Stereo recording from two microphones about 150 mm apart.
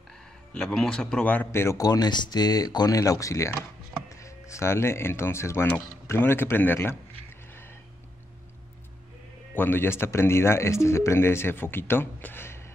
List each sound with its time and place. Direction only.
0.6 s speech: 5° left (ahead or behind)
9.5 s speech: 15° left (ahead or behind)